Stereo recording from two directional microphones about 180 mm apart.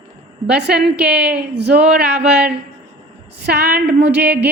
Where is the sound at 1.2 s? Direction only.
65° right (ahead or behind).